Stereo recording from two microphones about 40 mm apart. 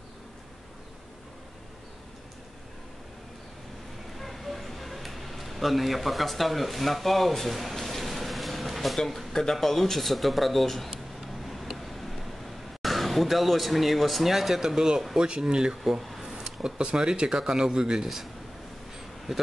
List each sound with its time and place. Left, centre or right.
4.2 s a sound: centre
9.3 s speech: centre
11.4 s a sound: centre
15.1 s speech: right
15.8 s speech: centre
16.3 s speech: centre
18.0 s speech: centre